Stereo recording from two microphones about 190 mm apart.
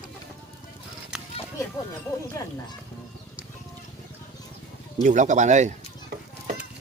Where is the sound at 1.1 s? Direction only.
5° right (ahead or behind).